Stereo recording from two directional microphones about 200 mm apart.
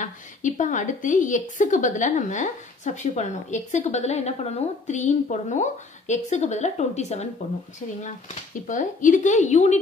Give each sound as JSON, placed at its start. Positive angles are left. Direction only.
{"t": 0.0, "sound": "a woman's voice", "side_deg": 40}
{"t": 8.6, "sound": "a woman's voice", "side_deg": 40}